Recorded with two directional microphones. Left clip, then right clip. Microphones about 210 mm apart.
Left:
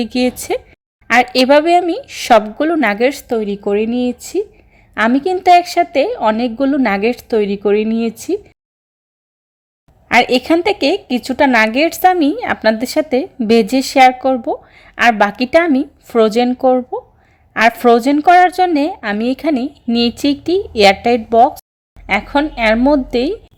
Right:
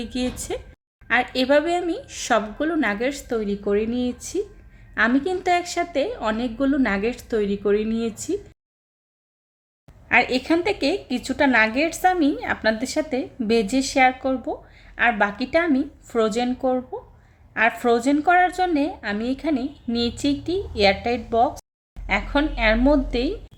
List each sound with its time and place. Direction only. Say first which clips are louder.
0.0 s a woman's voice: left 11 dB; 35° left (ahead or behind)
10.1 s a woman's voice: left 7 dB; 35° left (ahead or behind)